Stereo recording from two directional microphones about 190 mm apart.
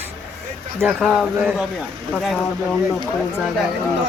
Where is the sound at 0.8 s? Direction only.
5° right (ahead or behind).